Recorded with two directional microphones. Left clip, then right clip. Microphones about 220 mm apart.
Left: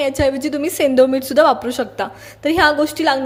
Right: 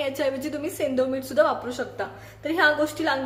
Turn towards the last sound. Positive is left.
turn(degrees=35)  # may be behind; listen again after turning